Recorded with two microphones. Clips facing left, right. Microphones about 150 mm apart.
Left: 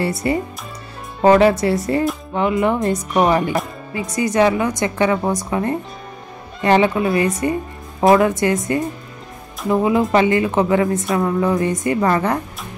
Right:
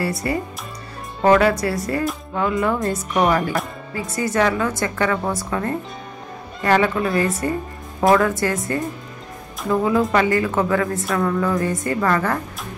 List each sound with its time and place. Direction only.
0.2 s a woman's voice: 20° left (ahead or behind)